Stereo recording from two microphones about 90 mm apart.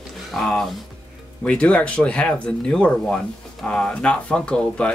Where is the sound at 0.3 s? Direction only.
5° left (ahead or behind).